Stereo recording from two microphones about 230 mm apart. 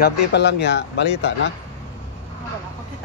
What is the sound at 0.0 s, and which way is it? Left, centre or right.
Speech, left.